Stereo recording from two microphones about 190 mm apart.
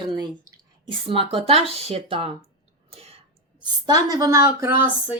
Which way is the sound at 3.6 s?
20° right (ahead or behind).